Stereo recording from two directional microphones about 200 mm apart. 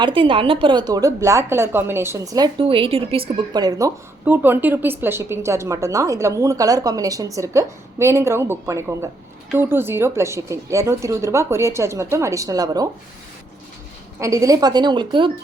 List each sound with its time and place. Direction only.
0.0 s a woman's voice: 25° right (ahead or behind)
14.2 s a woman's voice: 15° right (ahead or behind)